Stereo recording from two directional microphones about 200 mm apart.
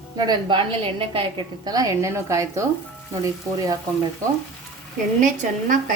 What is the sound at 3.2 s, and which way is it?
Frying, 15° right (ahead or behind).